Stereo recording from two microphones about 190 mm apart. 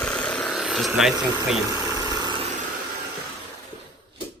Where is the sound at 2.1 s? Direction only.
25° right (ahead or behind).